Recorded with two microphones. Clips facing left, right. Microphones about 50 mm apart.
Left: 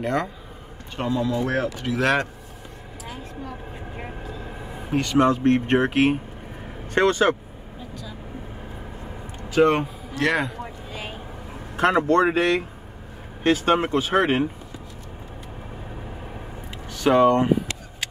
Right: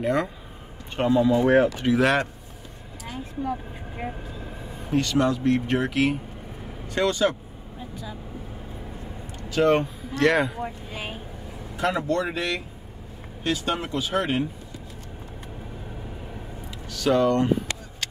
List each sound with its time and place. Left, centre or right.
0.0 s speech: centre
0.9 s speech: centre
2.0 s speech: centre
3.9 s speech: centre
4.5 s a sound: centre
5.1 s speech: left
9.7 s a man's voice: centre
11.7 s speech: left
16.9 s speech: left